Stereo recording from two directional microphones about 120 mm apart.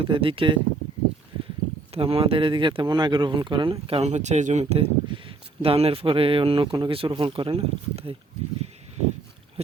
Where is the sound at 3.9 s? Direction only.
65° right (ahead or behind).